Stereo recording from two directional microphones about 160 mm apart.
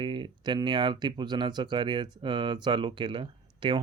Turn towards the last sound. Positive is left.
turn(degrees=-30)  # may be behind; listen again after turning